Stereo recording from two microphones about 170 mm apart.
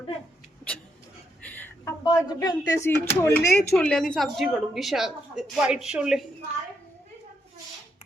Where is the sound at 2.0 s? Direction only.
25° left (ahead or behind); by 6.3 s 5° right (ahead or behind).